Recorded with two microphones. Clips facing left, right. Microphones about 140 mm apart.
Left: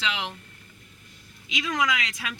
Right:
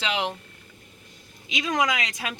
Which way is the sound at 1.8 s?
45° right (ahead or behind).